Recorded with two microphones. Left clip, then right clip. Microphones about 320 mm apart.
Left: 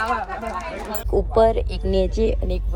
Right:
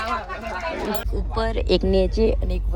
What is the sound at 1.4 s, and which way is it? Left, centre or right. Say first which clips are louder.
Speech: left 3 dB; centre.